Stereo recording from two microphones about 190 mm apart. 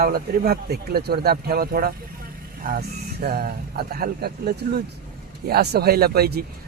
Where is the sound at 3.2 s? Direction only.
55° right (ahead or behind).